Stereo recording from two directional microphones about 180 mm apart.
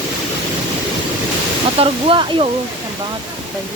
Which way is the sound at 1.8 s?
30° right (ahead or behind).